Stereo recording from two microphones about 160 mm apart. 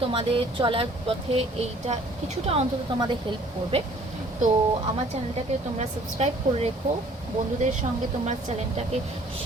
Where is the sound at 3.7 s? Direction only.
40° right (ahead or behind).